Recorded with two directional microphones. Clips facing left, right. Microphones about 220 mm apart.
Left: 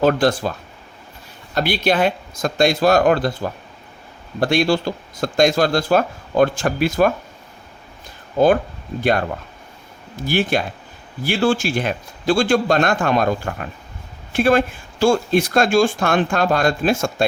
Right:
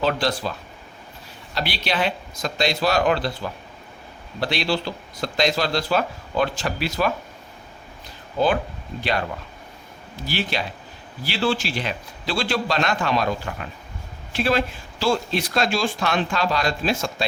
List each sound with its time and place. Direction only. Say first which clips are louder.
0.0 s speech: left 7 dB; 50° left (ahead or behind)
1.5 s speech: left 7 dB; 50° left (ahead or behind)
9.0 s speech: left 7 dB; 50° left (ahead or behind)
10.2 s speech: left 7 dB; 50° left (ahead or behind)